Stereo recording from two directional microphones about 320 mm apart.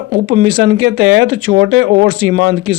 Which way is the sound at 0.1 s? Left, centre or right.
Right.